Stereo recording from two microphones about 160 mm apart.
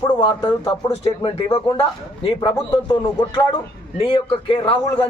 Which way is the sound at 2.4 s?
25° left (ahead or behind).